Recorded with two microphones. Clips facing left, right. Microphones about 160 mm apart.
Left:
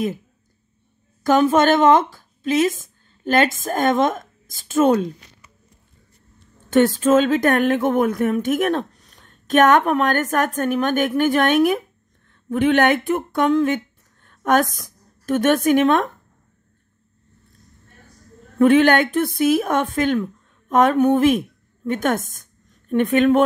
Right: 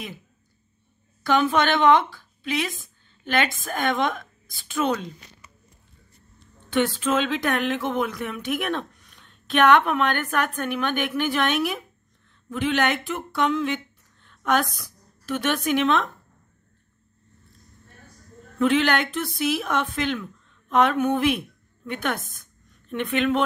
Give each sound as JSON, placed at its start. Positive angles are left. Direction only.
{"t": 1.2, "sound": "a woman's voice", "side_deg": 45}
{"t": 6.7, "sound": "a woman's voice", "side_deg": 40}
{"t": 18.6, "sound": "speech", "side_deg": 50}